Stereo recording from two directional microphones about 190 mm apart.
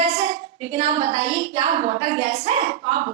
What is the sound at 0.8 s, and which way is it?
A woman's voice, 35° right (ahead or behind).